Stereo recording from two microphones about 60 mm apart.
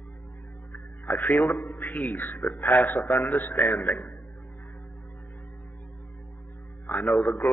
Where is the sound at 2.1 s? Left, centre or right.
Left.